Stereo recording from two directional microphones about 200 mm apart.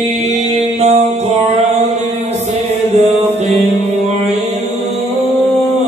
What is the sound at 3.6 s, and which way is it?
Music, 30° right (ahead or behind).